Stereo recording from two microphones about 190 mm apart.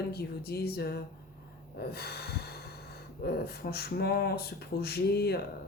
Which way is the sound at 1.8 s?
55° left (ahead or behind).